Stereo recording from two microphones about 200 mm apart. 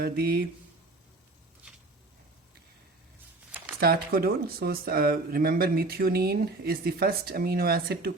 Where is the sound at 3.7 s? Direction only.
50° right (ahead or behind).